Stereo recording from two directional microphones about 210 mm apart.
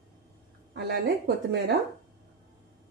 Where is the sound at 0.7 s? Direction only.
50° right (ahead or behind).